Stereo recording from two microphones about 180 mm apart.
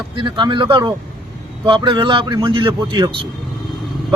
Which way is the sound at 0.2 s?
25° right (ahead or behind).